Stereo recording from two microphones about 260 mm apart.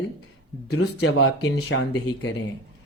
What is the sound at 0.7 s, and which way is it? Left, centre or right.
Speech, left.